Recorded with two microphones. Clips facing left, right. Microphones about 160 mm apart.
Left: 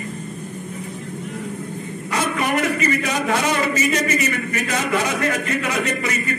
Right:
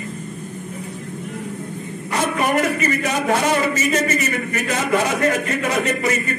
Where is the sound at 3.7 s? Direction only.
45° right (ahead or behind).